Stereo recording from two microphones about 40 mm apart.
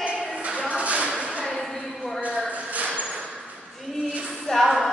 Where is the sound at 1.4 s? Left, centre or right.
Centre.